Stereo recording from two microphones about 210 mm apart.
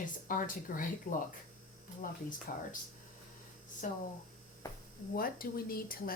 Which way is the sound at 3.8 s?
40° left (ahead or behind).